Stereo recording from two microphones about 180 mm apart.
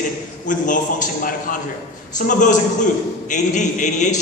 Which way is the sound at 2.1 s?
45° left (ahead or behind).